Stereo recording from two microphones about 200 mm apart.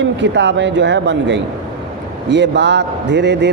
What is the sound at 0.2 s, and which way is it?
Speech, 60° right (ahead or behind).